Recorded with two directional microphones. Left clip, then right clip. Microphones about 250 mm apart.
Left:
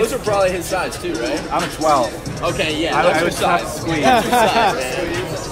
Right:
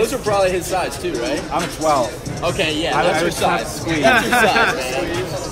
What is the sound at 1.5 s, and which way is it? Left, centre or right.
Speech, centre.